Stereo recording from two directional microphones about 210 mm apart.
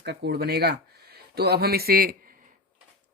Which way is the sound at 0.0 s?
50° right (ahead or behind).